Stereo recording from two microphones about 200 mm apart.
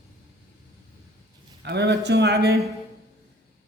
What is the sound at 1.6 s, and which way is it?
Speech, 55° right (ahead or behind).